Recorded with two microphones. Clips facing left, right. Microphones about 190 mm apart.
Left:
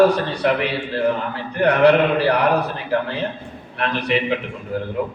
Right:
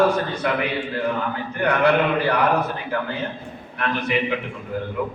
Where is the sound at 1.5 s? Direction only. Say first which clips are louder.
Left 5 dB; 35° left (ahead or behind).